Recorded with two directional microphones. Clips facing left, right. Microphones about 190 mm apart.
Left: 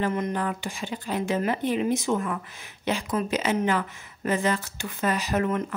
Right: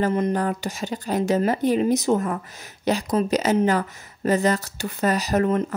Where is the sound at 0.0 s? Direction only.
35° right (ahead or behind).